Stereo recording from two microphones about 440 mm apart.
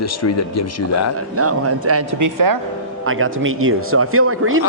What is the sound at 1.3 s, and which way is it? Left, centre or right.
Speech, right.